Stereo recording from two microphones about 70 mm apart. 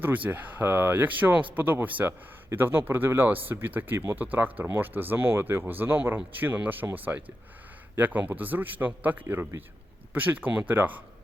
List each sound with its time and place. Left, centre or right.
0.0 s speech: right
9.2 s speech: right